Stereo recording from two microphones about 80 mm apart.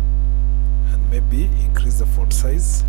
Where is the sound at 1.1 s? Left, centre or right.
Centre.